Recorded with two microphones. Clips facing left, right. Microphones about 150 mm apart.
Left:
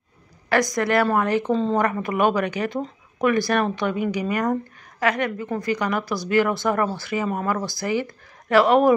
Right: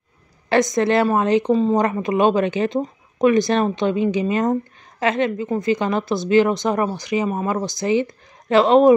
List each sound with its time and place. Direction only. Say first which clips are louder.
0.5 s a woman's voice: right 4 dB; 25° right (ahead or behind)
1.5 s speech: right 4 dB; 10° right (ahead or behind)
1.8 s a woman's voice: right 3 dB; 20° right (ahead or behind)